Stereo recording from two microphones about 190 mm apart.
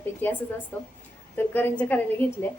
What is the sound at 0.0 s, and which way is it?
A woman's voice, 10° left (ahead or behind).